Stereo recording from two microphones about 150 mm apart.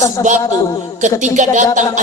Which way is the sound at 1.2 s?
55° right (ahead or behind).